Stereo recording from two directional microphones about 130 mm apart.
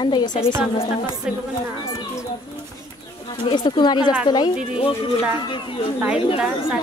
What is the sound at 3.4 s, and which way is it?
Speech, 35° left (ahead or behind).